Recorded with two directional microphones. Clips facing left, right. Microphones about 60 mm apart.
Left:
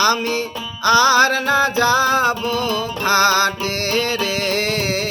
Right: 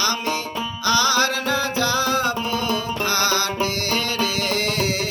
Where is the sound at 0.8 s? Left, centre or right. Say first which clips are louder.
Left 7 dB; left.